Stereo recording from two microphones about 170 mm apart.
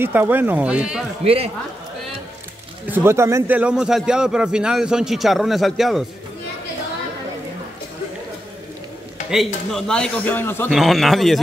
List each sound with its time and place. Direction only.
0.0 s speech: 10° right (ahead or behind)
1.2 s a man's voice: 35° right (ahead or behind)
2.9 s speech: 15° right (ahead or behind)
9.7 s a man's voice: 5° left (ahead or behind)
10.7 s speech: centre (ahead or behind)